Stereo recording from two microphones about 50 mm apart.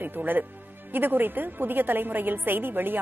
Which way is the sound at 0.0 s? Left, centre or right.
Right.